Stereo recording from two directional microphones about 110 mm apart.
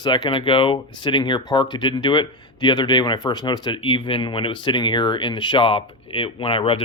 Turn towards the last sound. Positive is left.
turn(degrees=50)  # may be behind; listen again after turning